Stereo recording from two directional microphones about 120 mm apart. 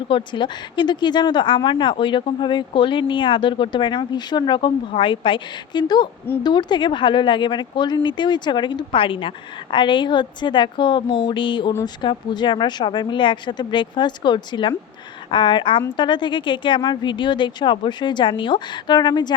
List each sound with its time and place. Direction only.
0.1 s speech: 40° left (ahead or behind)
11.2 s a sound: 45° left (ahead or behind)
12.0 s speech: 40° left (ahead or behind)